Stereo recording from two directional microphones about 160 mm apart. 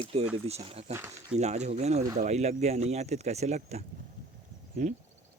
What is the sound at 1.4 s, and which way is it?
Speech, 45° right (ahead or behind).